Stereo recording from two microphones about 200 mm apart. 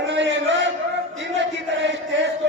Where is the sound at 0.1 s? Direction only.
60° right (ahead or behind).